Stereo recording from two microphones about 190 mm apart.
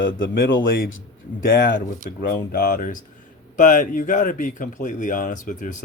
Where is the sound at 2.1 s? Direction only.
50° left (ahead or behind).